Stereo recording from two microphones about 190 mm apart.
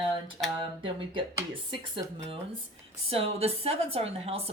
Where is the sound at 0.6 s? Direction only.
25° right (ahead or behind).